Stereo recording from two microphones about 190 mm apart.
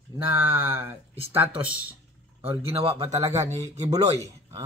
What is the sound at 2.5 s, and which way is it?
Speech, 30° right (ahead or behind).